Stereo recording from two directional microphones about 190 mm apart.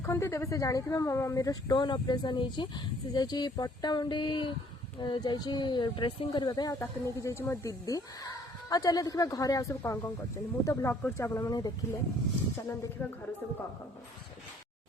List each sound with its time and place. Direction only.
0.0 s a woman's voice: 15° left (ahead or behind)
13.0 s speech: 10° left (ahead or behind)